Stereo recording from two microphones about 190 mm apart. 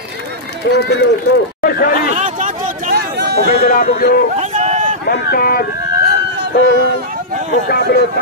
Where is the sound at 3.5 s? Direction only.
45° left (ahead or behind).